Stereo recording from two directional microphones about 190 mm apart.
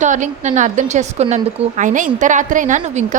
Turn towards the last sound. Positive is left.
turn(degrees=-40)  # may be behind; listen again after turning